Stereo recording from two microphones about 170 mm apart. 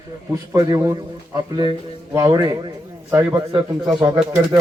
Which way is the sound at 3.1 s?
15° right (ahead or behind).